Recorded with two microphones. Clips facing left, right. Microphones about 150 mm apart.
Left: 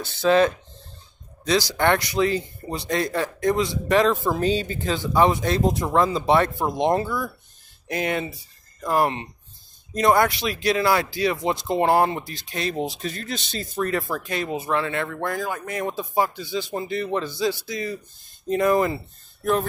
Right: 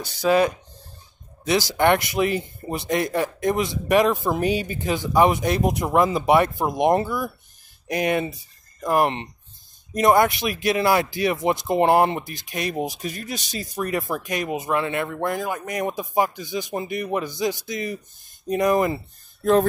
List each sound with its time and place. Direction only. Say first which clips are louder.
0.0 s speech: left 1 dB; 15° right (ahead or behind)
1.7 s a man's voice: right 2 dB; 20° right (ahead or behind)